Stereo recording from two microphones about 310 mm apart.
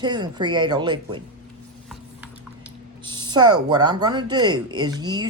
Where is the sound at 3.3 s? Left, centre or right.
Centre.